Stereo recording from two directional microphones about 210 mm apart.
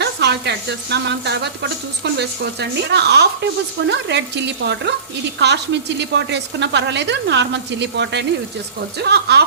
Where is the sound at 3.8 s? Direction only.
55° right (ahead or behind).